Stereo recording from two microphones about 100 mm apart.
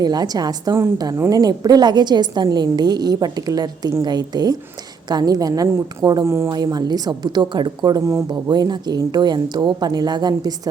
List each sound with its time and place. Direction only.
0.0 s a woman's voice: 40° right (ahead or behind)
6.2 s speech: 25° right (ahead or behind)
6.5 s a woman's voice: 40° right (ahead or behind)